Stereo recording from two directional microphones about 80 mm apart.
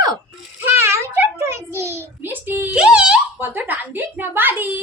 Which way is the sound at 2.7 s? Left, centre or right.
Centre.